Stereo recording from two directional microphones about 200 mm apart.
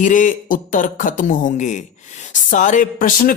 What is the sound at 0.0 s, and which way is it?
Speech, 40° left (ahead or behind).